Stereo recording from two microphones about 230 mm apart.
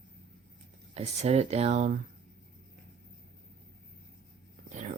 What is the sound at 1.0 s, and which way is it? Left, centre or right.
Speech, right.